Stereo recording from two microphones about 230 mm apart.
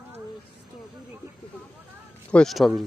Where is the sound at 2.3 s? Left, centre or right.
Centre.